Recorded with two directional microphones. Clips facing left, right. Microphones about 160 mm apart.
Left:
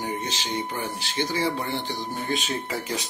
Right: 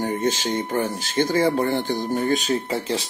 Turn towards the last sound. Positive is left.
turn(degrees=-30)  # may be behind; listen again after turning